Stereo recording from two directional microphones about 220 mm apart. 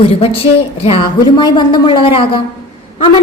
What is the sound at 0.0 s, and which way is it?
A woman's voice, 25° left (ahead or behind).